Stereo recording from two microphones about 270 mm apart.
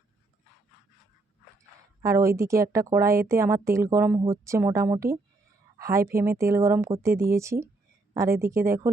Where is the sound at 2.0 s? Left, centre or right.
Centre.